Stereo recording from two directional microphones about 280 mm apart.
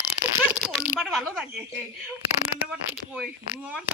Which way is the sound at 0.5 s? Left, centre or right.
Centre.